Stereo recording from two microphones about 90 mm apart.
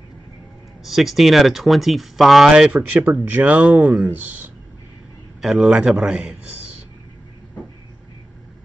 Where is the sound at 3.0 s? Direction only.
20° right (ahead or behind).